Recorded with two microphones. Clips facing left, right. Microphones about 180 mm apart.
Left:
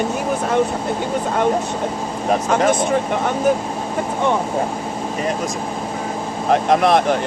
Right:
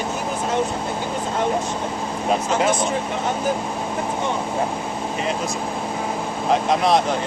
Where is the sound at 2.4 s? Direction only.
55° left (ahead or behind).